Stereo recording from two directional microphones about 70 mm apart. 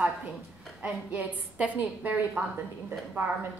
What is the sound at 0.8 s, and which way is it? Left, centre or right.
A woman's voice, centre.